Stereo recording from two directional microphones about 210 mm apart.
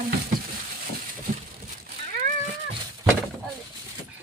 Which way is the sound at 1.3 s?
40° right (ahead or behind).